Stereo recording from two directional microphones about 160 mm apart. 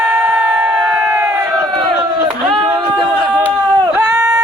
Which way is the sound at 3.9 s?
15° right (ahead or behind).